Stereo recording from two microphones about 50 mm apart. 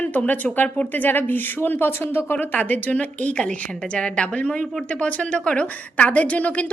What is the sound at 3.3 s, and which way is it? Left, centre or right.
A woman's voice, left.